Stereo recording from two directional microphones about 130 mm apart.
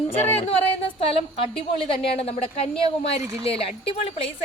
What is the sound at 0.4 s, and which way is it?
A woman's voice, 45° left (ahead or behind).